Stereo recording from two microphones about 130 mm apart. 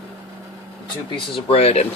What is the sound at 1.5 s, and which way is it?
Speech, 50° left (ahead or behind).